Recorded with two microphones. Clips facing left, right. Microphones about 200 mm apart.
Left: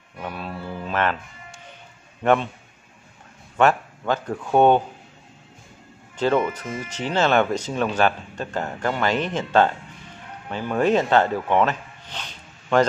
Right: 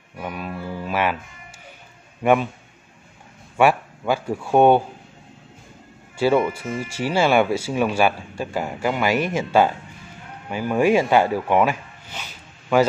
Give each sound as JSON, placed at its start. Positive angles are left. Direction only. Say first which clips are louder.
{"t": 0.2, "sound": "music", "louder": "right 2 dB", "side_deg": -10}
{"t": 2.2, "sound": "speech", "louder": "right 1 dB", "side_deg": -10}
{"t": 3.5, "sound": "speech", "louder": "right 1 dB", "side_deg": -10}
{"t": 6.1, "sound": "speech", "louder": "right 2 dB", "side_deg": -10}